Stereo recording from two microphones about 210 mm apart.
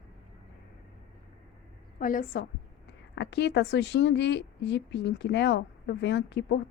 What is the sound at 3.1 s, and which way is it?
A woman's voice, 55° left (ahead or behind).